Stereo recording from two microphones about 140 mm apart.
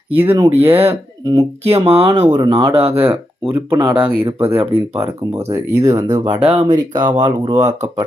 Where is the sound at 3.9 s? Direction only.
40° right (ahead or behind).